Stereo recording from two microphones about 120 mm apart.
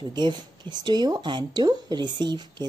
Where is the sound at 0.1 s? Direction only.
40° right (ahead or behind).